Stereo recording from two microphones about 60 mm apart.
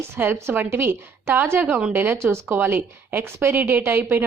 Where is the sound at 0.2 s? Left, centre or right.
Right.